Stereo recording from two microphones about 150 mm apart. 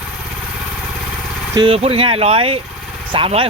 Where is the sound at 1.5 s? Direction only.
35° right (ahead or behind).